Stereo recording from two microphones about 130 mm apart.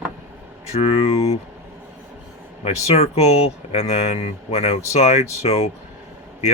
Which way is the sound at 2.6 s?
55° left (ahead or behind).